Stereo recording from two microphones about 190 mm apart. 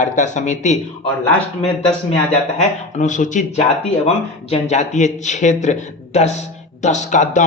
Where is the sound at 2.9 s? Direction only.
40° left (ahead or behind).